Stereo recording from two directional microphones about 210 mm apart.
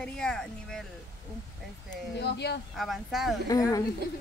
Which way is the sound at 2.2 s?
50° left (ahead or behind).